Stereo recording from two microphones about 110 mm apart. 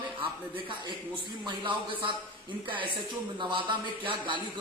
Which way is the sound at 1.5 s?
50° right (ahead or behind).